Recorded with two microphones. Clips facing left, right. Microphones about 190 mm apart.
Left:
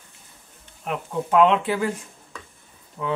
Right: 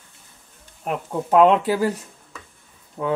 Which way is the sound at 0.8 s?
40° right (ahead or behind).